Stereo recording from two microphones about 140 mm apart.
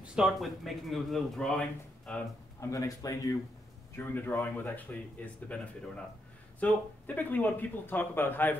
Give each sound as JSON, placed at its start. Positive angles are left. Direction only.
{"t": 0.0, "sound": "speech", "side_deg": -5}
{"t": 2.7, "sound": "a man's voice", "side_deg": 25}